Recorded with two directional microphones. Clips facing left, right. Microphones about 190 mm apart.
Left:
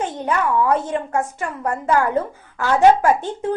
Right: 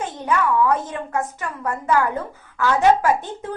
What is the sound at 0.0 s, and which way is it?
A woman's voice, 35° left (ahead or behind).